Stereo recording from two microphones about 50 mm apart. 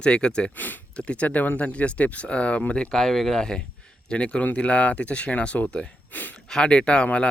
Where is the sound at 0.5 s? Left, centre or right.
Left.